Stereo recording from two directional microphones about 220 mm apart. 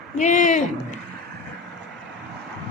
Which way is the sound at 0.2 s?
35° left (ahead or behind).